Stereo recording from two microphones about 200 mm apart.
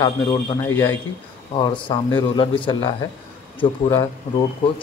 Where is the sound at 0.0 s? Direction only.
15° left (ahead or behind).